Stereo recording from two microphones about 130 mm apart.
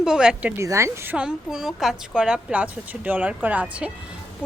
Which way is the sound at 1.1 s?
5° right (ahead or behind).